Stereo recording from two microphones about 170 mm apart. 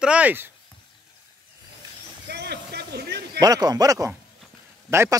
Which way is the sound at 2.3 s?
75° right (ahead or behind).